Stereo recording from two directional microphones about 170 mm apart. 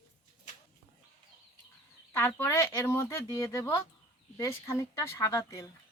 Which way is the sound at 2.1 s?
10° left (ahead or behind).